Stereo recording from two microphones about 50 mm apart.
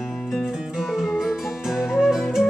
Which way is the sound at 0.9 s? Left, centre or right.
Centre.